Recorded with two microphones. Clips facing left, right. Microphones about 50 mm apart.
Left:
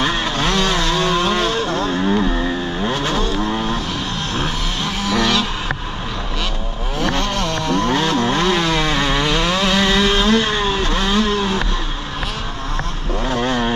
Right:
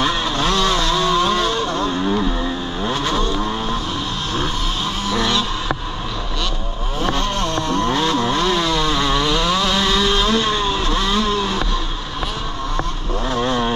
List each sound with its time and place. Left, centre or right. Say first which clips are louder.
0.0 s vehicle: even; centre
0.5 s vehicle: right 1 dB; left; by 3.2 s centre
5.1 s a sound: left 2 dB; left
7.2 s vehicle: even; left; by 10.8 s centre
10.8 s vehicle: left 1 dB; left
11.1 s vehicle: left 1 dB; left
13.3 s vehicle: even; left